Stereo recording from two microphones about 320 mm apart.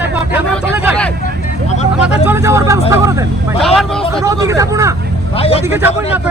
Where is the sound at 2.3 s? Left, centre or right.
Centre.